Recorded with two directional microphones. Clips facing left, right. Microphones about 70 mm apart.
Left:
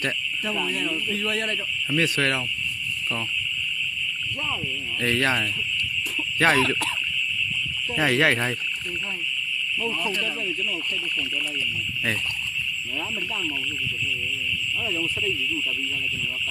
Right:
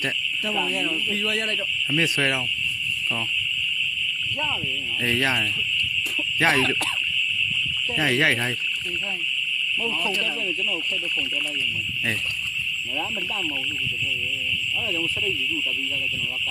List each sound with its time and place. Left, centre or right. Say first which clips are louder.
2.0 s speech: even; centre
5.0 s speech: left 1 dB; centre
7.9 s speech: left 1 dB; centre